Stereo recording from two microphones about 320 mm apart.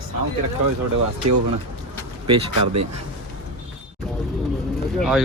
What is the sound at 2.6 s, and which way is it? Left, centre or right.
Speech, right.